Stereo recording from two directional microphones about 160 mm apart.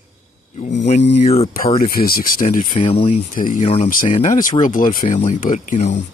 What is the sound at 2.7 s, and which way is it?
Speech, 40° left (ahead or behind).